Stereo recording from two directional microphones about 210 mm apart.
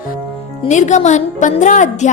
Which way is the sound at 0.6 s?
35° left (ahead or behind).